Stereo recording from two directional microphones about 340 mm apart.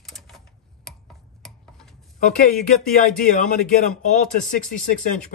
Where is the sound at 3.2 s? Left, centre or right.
Left.